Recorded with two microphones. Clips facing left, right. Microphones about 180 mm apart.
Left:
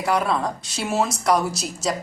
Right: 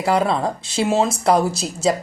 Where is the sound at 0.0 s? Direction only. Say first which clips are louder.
Right 3 dB; 30° right (ahead or behind).